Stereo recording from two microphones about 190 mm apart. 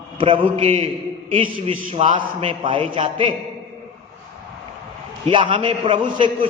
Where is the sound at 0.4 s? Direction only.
40° right (ahead or behind).